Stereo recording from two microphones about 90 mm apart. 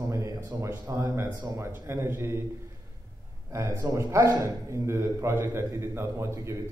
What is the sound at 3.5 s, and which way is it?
A man's voice, 30° right (ahead or behind).